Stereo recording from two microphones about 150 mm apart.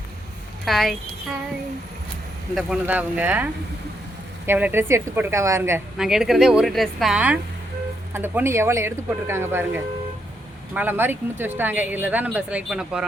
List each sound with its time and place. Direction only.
0.6 s speech: centre (ahead or behind)
2.6 s speech: 5° right (ahead or behind)
6.0 s speech: 5° right (ahead or behind)